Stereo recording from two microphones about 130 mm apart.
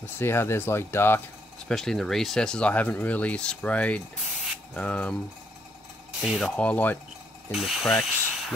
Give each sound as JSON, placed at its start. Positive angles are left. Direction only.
{"t": 0.0, "sound": "speech", "side_deg": 20}
{"t": 1.7, "sound": "speech", "side_deg": 5}
{"t": 6.2, "sound": "speech", "side_deg": 0}
{"t": 6.5, "sound": "speech", "side_deg": 10}
{"t": 7.5, "sound": "speech", "side_deg": 0}